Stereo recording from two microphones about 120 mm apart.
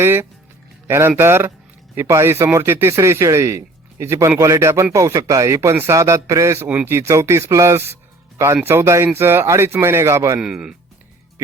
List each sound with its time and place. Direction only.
0.0 s speech: 20° right (ahead or behind)
10.4 s speech: 5° right (ahead or behind)